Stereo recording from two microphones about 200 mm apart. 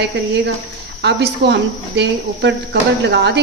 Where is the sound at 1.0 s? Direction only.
55° right (ahead or behind).